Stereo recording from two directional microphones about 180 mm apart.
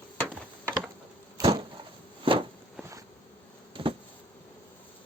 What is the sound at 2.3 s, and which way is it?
Walk, 30° right (ahead or behind).